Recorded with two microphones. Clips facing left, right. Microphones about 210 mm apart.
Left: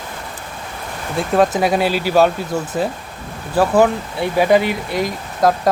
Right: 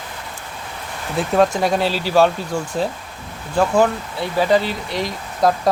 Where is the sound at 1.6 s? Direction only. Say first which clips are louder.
Left 2 dB; 5° left (ahead or behind).